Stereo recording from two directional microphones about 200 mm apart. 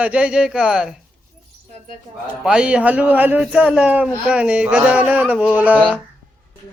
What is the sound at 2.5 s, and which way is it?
Speech, 5° right (ahead or behind).